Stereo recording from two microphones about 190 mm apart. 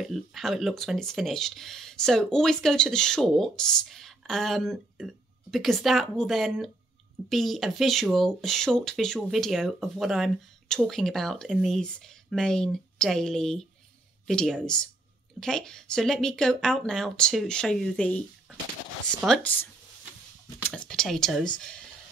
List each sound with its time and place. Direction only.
0.0 s speech: centre (ahead or behind)